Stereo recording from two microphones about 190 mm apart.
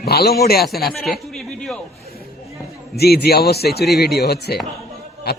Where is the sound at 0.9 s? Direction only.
Centre (ahead or behind).